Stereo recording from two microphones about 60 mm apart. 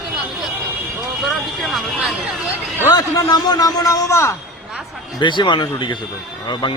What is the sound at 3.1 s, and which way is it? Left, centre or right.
Speech, left.